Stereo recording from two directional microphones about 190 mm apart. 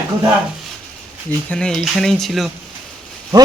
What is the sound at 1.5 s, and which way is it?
A man's voice, 5° left (ahead or behind).